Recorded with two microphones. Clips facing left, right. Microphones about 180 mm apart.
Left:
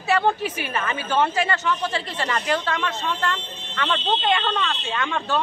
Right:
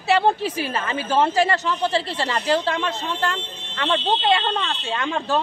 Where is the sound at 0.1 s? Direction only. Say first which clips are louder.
Right 2 dB; 30° right (ahead or behind).